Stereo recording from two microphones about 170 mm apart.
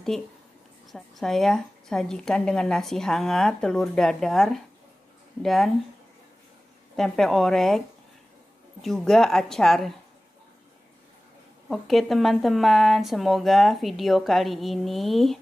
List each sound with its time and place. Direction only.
0.1 s a woman's voice: centre (ahead or behind)
7.0 s a woman's voice: centre (ahead or behind)
8.8 s a woman's voice: 5° left (ahead or behind)
11.7 s a woman's voice: centre (ahead or behind)